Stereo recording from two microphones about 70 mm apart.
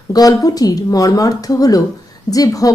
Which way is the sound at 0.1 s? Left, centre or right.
Left.